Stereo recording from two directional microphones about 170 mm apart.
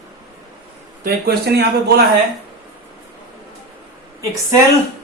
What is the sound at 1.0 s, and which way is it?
Speech, 65° right (ahead or behind).